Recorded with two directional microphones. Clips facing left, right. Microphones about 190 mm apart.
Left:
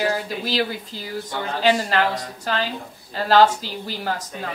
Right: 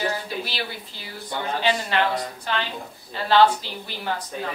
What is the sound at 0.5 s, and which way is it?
A woman's voice, 40° left (ahead or behind).